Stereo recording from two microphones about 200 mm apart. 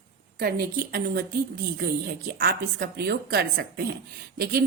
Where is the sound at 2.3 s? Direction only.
50° right (ahead or behind).